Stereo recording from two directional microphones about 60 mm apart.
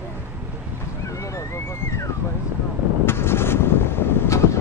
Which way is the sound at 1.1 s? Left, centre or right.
Left.